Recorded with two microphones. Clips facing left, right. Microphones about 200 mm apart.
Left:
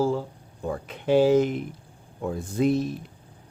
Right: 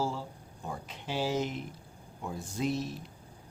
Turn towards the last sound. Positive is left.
turn(degrees=55)  # may be behind; listen again after turning